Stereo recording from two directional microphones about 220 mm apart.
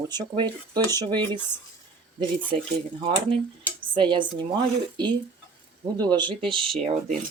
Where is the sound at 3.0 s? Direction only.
25° right (ahead or behind).